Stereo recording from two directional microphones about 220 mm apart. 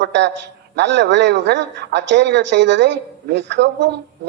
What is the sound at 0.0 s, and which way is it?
A man's voice, 55° right (ahead or behind).